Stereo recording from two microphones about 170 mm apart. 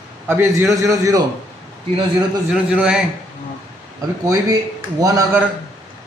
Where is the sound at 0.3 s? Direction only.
15° right (ahead or behind).